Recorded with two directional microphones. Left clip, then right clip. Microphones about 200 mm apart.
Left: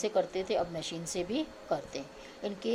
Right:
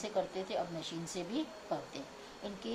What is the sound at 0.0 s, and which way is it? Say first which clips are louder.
A woman's voice: left 6 dB; 45° left (ahead or behind).